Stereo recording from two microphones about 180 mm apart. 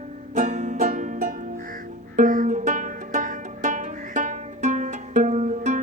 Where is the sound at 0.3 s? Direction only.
40° right (ahead or behind).